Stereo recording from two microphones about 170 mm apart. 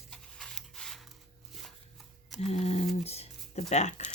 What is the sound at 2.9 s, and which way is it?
Music, 35° left (ahead or behind).